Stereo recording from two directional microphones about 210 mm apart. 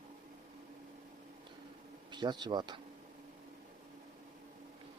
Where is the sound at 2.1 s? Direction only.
20° right (ahead or behind).